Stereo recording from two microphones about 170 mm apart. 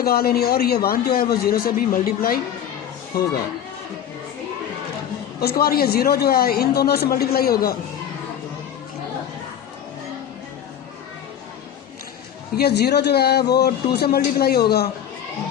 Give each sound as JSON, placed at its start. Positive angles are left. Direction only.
{"t": 0.0, "sound": "a woman's voice", "side_deg": 65}
{"t": 5.4, "sound": "a woman's voice", "side_deg": 65}
{"t": 12.5, "sound": "speech", "side_deg": 70}